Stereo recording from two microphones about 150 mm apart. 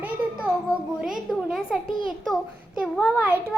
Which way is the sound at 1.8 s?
65° right (ahead or behind).